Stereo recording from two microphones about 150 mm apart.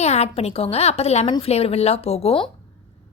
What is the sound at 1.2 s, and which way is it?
Speech, 30° left (ahead or behind).